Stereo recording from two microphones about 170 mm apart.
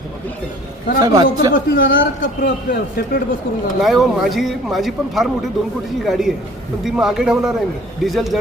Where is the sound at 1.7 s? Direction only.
60° left (ahead or behind).